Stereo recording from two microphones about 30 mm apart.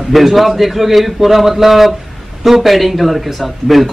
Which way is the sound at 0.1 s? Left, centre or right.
Centre.